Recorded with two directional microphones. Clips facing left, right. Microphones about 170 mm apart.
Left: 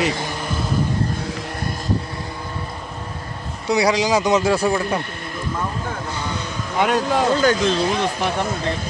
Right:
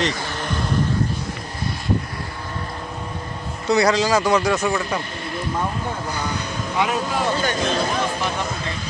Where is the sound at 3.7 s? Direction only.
15° left (ahead or behind); by 5.0 s 30° left (ahead or behind).